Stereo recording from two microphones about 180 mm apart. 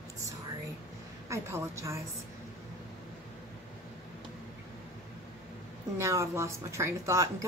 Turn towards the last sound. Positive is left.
turn(degrees=-15)  # may be behind; listen again after turning